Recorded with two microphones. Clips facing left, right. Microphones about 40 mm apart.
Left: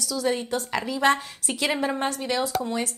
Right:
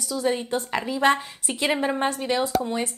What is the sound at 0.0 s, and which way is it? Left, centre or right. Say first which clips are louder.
Speech: right 1 dB; right.